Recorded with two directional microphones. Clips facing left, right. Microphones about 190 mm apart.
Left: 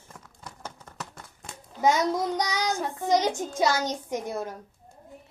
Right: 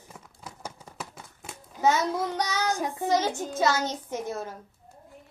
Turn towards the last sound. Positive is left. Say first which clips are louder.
# left 2 dB
turn(degrees=15)  # may be behind; listen again after turning